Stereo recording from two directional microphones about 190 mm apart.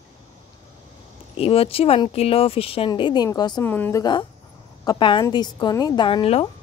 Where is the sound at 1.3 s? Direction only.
30° left (ahead or behind).